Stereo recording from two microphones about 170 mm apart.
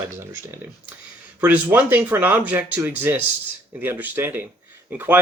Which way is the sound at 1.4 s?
10° right (ahead or behind).